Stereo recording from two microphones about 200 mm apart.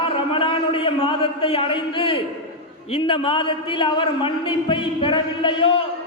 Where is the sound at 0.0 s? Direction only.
25° left (ahead or behind).